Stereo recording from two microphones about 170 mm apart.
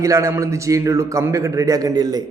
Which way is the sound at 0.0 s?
20° right (ahead or behind).